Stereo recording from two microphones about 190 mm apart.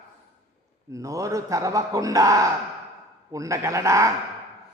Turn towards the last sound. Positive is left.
turn(degrees=-15)  # may be behind; listen again after turning